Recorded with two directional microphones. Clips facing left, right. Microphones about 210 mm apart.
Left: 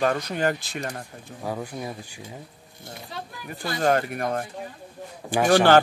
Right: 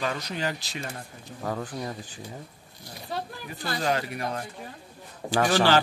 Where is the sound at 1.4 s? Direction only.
10° left (ahead or behind).